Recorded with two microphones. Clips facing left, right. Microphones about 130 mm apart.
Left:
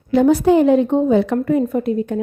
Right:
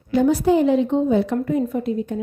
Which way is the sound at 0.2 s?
70° left (ahead or behind).